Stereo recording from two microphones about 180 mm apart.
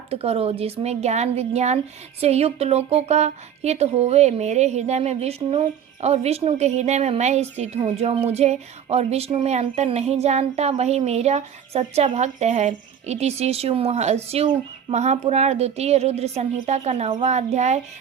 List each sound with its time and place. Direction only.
0.1 s speech: 35° right (ahead or behind)